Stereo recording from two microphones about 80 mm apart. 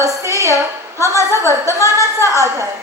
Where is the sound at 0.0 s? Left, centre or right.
Right.